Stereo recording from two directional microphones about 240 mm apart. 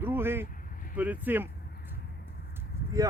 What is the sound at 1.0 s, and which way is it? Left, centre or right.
Speech, centre.